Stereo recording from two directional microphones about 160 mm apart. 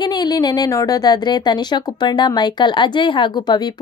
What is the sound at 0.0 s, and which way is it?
Speech, 25° left (ahead or behind).